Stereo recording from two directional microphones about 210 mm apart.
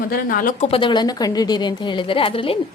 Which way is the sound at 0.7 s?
25° left (ahead or behind).